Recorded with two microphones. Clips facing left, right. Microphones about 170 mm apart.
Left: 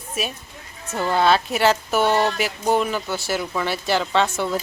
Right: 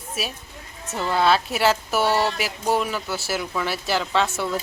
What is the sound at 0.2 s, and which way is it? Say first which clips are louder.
Speech: left 3 dB; centre (ahead or behind).